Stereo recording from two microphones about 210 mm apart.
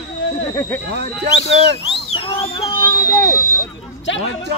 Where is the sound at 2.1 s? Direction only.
25° left (ahead or behind).